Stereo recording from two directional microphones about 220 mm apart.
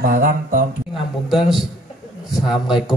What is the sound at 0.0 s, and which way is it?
Speech, 40° right (ahead or behind).